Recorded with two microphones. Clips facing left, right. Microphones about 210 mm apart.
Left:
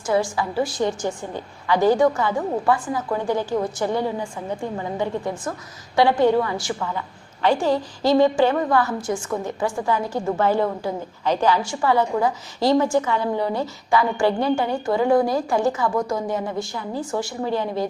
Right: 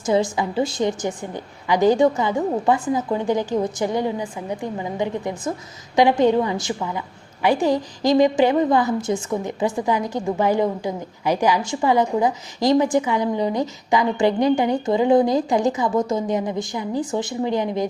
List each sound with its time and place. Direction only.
0.0 s a woman's voice: 20° right (ahead or behind)